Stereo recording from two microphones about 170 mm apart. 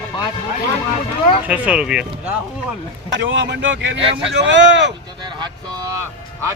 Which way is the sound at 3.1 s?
90° right.